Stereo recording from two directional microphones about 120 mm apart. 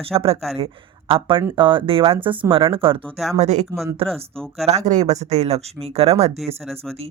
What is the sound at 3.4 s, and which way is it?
Speech, 80° right.